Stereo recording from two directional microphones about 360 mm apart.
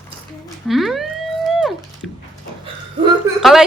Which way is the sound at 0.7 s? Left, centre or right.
Centre.